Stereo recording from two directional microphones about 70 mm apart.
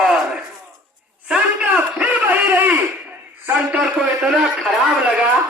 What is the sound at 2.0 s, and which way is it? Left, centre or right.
Speech, right.